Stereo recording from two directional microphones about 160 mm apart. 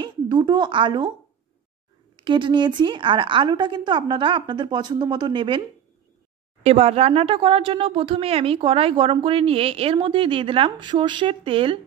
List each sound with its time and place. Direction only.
0.0 s speech: 25° right (ahead or behind)
2.1 s a woman's voice: 30° right (ahead or behind)
6.6 s speech: 40° right (ahead or behind)